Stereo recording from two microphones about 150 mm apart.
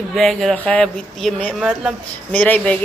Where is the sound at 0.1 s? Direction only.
Centre (ahead or behind).